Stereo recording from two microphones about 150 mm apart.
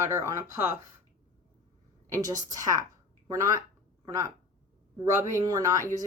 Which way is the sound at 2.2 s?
25° right (ahead or behind).